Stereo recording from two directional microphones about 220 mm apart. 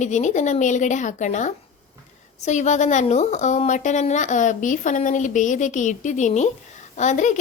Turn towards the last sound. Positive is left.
turn(degrees=35)  # may be behind; listen again after turning